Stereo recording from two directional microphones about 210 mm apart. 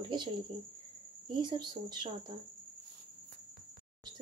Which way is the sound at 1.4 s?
20° right (ahead or behind).